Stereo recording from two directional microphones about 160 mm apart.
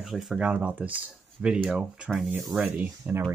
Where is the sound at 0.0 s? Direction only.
Centre (ahead or behind).